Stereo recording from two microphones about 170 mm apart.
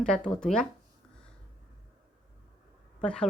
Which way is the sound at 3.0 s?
5° left (ahead or behind).